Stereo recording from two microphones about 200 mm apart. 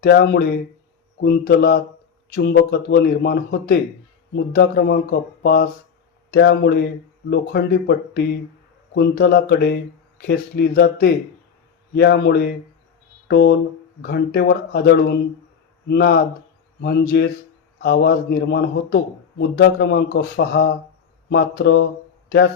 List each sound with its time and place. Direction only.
0.0 s a man's voice: 55° left (ahead or behind)